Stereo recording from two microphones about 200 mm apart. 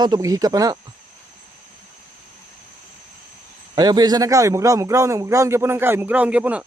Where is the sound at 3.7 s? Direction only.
20° right (ahead or behind).